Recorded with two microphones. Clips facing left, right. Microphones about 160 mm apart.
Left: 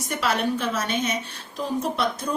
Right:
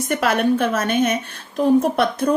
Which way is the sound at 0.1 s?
55° right (ahead or behind).